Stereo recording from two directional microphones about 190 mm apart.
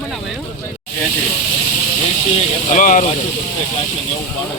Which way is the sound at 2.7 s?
40° left (ahead or behind).